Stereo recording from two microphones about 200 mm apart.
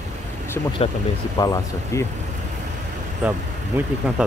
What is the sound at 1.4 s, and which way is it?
Speech, 15° left (ahead or behind).